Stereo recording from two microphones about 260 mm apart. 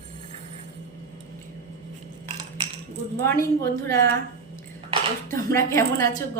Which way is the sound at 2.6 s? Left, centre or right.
Centre.